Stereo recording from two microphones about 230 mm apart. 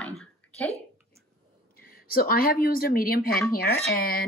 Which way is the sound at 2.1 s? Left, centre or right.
Left.